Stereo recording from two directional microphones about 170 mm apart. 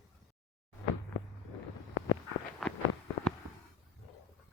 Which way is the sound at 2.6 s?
Centre (ahead or behind).